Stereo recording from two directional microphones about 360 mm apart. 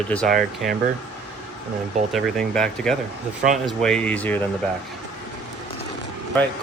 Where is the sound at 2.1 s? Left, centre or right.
Centre.